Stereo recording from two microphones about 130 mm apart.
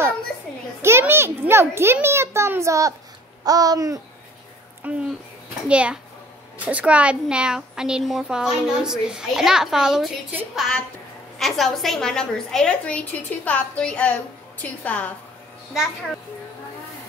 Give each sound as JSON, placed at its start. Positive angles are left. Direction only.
{"t": 0.8, "sound": "a child's voice", "side_deg": -20}
{"t": 3.4, "sound": "babbling", "side_deg": -30}
{"t": 4.8, "sound": "a child's voice", "side_deg": -10}